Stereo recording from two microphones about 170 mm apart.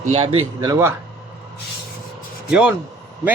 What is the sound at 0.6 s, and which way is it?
Speech, 15° right (ahead or behind).